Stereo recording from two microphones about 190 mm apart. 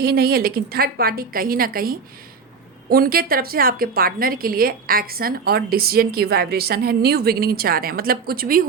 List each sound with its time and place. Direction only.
0.0 s a woman's voice: 55° right (ahead or behind)